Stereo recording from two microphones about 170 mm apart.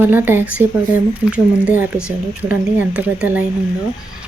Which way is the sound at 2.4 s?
10° right (ahead or behind).